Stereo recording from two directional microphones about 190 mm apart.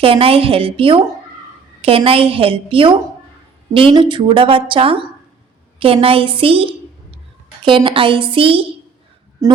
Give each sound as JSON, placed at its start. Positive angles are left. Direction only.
{"t": 0.0, "sound": "a woman's voice", "side_deg": -30}